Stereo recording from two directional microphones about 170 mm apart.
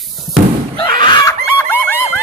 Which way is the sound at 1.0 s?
25° left (ahead or behind).